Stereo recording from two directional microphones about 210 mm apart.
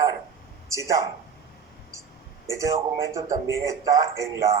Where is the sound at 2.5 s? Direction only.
15° right (ahead or behind).